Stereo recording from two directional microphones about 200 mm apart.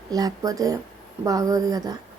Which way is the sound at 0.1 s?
20° right (ahead or behind).